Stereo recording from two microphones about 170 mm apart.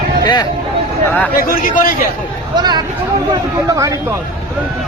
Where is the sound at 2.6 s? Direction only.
25° right (ahead or behind).